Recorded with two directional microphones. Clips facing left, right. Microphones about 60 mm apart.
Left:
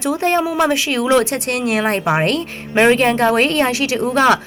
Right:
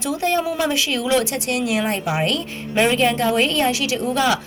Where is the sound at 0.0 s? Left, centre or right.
Left.